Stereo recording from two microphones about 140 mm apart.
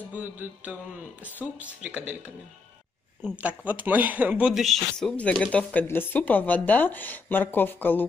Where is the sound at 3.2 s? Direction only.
10° right (ahead or behind).